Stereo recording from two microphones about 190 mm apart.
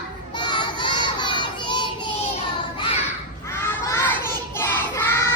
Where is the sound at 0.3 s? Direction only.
25° left (ahead or behind).